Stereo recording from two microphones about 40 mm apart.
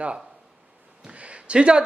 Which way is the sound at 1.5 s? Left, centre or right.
Right.